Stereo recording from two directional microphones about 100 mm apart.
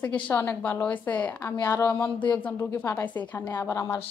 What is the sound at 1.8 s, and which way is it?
A woman's voice, 15° left (ahead or behind).